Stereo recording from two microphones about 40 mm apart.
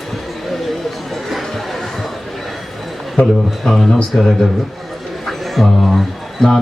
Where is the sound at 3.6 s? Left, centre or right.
Centre.